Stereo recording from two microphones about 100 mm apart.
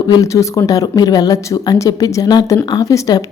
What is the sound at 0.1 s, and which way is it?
Speech, 35° left (ahead or behind).